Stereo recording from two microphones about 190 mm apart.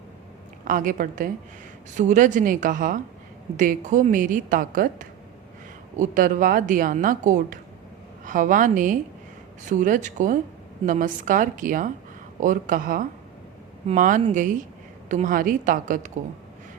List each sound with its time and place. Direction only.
0.6 s a woman's voice: 45° right (ahead or behind)